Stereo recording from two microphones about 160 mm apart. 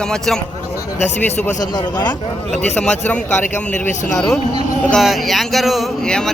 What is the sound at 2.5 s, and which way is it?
Speech, 45° left (ahead or behind).